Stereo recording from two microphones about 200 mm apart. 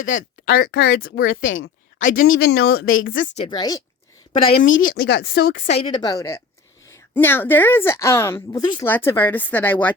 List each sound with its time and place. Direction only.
0.0 s speech: 80° left
0.7 s speech: 50° left (ahead or behind)
1.3 s speech: 75° left (ahead or behind); by 2.5 s 90° left
2.5 s speech: 55° left (ahead or behind)
2.8 s a woman's voice: 80° left
3.3 s a woman's voice: 20° left (ahead or behind)
4.6 s speech: 75° left (ahead or behind)
4.9 s speech: 55° left (ahead or behind)
5.6 s a woman's voice: 30° left (ahead or behind); by 9.9 s 10° left (ahead or behind)